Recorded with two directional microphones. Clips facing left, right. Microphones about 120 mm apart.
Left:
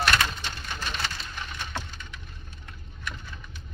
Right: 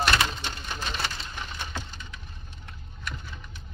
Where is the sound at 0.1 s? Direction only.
25° right (ahead or behind).